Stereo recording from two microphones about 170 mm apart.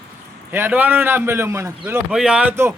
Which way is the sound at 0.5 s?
10° right (ahead or behind).